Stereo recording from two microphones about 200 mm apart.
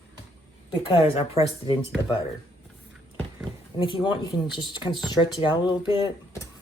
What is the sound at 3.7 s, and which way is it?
Speech, 25° left (ahead or behind).